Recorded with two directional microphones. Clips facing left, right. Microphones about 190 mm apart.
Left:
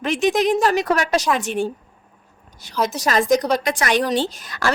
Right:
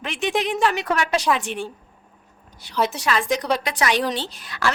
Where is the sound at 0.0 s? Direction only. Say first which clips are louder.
Left 6 dB; 40° left (ahead or behind).